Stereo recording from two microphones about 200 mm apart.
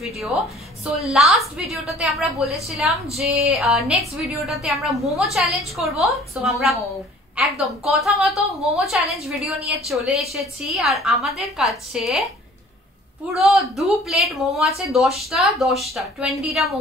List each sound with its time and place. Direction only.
0.0 s a woman's voice: centre (ahead or behind)
13.5 s a woman's voice: centre (ahead or behind)